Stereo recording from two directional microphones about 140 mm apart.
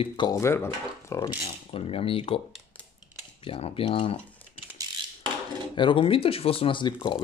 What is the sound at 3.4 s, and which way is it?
Speech, 40° left (ahead or behind).